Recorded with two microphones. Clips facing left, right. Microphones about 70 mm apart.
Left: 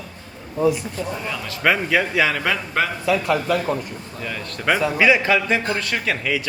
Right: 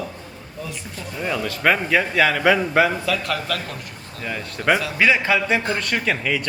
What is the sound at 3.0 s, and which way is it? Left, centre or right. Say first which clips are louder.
A man's voice: left 4 dB; centre.